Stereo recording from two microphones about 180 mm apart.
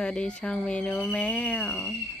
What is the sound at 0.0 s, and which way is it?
Speech, 5° left (ahead or behind).